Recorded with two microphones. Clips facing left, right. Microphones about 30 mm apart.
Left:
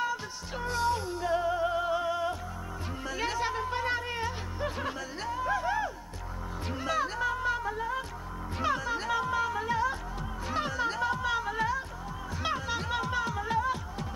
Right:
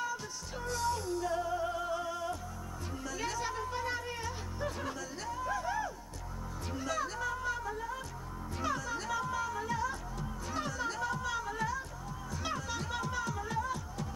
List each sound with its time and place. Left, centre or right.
0.0 s music: left
6.7 s speech: left
8.5 s music: left